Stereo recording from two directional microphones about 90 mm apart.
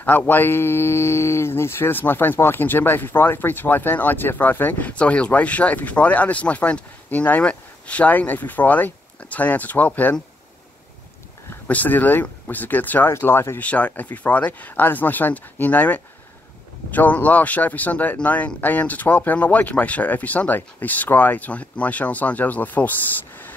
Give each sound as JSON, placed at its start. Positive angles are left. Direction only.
{"t": 0.0, "sound": "speech", "side_deg": 20}
{"t": 11.6, "sound": "speech", "side_deg": 20}
{"t": 13.7, "sound": "speech", "side_deg": 15}